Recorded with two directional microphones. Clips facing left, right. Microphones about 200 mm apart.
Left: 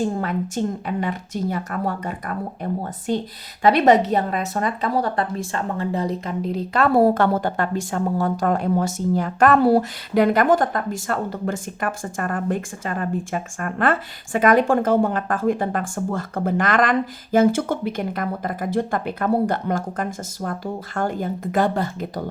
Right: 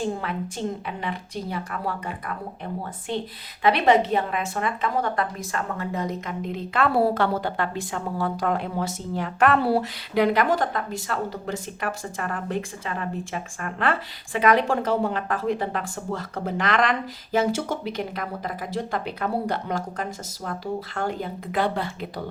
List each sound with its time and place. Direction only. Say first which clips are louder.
0.2 s a woman's voice: left 6 dB; 45° left (ahead or behind)
3.6 s a woman's voice: left 4 dB; 40° left (ahead or behind)